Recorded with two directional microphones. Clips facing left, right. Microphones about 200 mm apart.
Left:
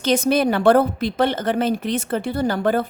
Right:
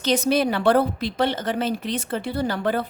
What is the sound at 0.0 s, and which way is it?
A woman's voice, 50° left (ahead or behind).